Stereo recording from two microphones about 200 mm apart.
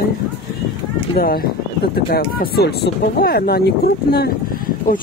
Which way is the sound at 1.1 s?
50° left (ahead or behind).